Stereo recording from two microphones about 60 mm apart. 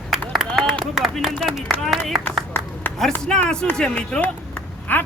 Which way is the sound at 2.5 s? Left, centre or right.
Left.